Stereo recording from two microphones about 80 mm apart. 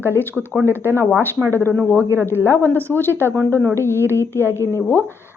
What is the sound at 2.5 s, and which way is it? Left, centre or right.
A woman's voice, left.